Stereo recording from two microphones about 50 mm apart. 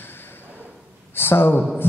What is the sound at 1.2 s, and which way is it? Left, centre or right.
Speech, left.